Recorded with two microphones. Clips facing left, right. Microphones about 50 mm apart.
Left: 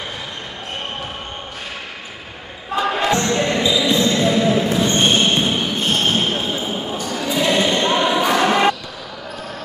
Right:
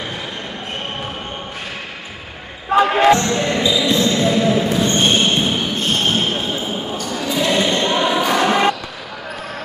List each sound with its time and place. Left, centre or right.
2.7 s basketball bounce: right
3.2 s basketball bounce: centre
7.1 s a sound: centre